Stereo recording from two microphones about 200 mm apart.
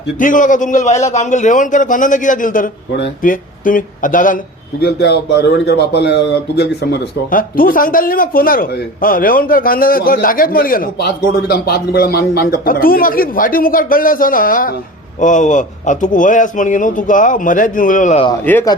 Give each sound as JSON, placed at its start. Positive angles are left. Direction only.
{"t": 0.2, "sound": "speech", "side_deg": 40}
{"t": 4.8, "sound": "a man's voice", "side_deg": 55}
{"t": 18.4, "sound": "speech", "side_deg": 10}